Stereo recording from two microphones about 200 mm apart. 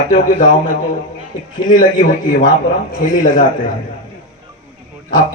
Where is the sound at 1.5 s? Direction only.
40° left (ahead or behind).